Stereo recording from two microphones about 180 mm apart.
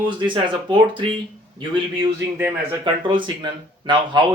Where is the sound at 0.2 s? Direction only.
25° right (ahead or behind).